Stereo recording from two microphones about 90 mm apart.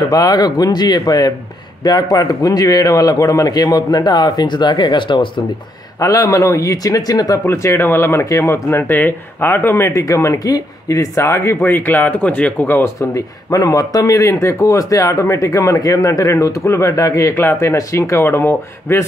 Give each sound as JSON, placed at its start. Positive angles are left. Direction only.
{"t": 0.1, "sound": "a man's voice", "side_deg": 45}
{"t": 5.9, "sound": "speech", "side_deg": 40}
{"t": 7.4, "sound": "speech", "side_deg": 30}
{"t": 17.3, "sound": "speech", "side_deg": 25}